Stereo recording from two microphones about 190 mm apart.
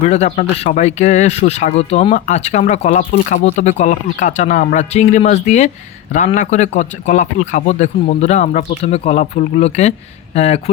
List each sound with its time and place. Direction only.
0.0 s speech: 35° left (ahead or behind)